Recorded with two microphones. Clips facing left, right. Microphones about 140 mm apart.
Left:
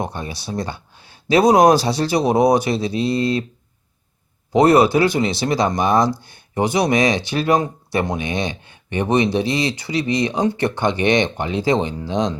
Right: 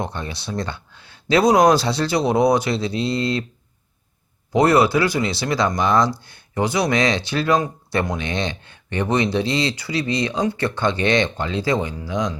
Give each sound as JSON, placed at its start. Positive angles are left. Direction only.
{"t": 0.0, "sound": "speech", "side_deg": 15}
{"t": 4.5, "sound": "speech", "side_deg": 20}